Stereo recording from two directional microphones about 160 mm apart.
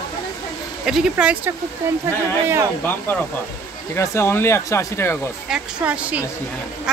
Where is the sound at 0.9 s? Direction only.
5° right (ahead or behind).